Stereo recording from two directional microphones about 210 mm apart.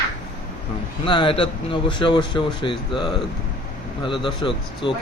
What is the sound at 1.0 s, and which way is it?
Speech, 25° left (ahead or behind).